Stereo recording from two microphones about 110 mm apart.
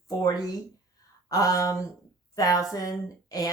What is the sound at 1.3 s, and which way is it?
Speech, 30° left (ahead or behind).